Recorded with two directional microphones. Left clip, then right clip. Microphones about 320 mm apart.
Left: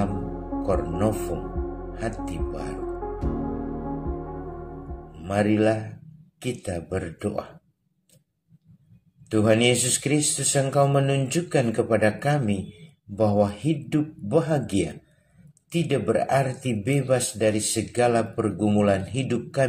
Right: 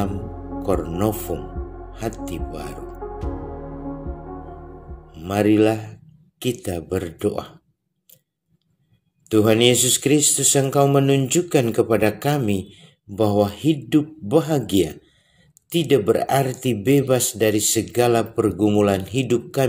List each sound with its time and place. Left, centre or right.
0.7 s speech: right
5.2 s speech: right
9.3 s speech: right